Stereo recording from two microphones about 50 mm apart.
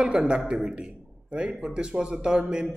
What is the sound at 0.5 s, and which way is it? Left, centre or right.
A man's voice, centre.